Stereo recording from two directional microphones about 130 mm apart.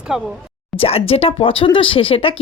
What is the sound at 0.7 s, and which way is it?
Speech, 45° left (ahead or behind).